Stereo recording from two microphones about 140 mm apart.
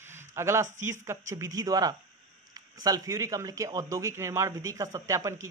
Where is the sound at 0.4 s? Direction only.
20° right (ahead or behind).